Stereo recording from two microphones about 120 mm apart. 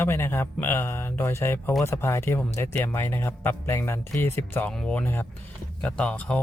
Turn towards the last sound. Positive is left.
turn(degrees=10)  # may be behind; listen again after turning